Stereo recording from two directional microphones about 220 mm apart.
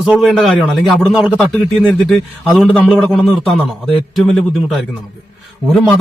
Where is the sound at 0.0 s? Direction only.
Centre (ahead or behind).